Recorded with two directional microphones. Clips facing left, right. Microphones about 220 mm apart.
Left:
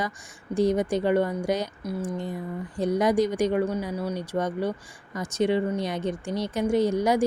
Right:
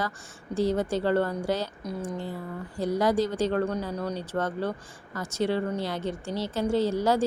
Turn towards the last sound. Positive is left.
turn(degrees=15)  # may be behind; listen again after turning